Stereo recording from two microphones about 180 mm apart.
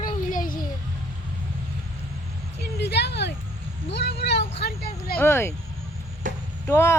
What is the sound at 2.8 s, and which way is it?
Speech, 70° left (ahead or behind).